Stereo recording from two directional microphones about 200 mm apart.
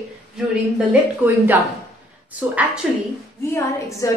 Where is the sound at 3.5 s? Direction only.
15° left (ahead or behind).